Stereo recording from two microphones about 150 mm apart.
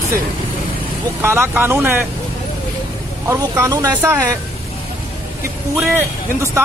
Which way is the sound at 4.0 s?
15° right (ahead or behind).